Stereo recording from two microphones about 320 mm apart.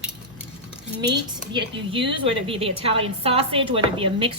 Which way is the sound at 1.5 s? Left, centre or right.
Centre.